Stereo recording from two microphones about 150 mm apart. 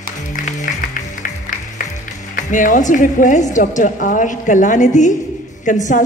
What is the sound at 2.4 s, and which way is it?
A woman's voice, 60° left (ahead or behind).